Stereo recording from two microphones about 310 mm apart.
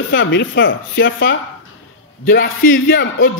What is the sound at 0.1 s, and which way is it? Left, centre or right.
Speech, left.